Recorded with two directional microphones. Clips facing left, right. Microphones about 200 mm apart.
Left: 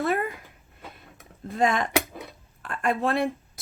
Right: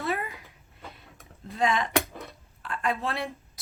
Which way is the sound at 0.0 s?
50° left (ahead or behind).